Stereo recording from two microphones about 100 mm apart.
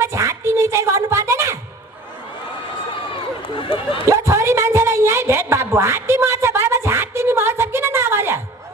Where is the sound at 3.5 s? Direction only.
65° left (ahead or behind).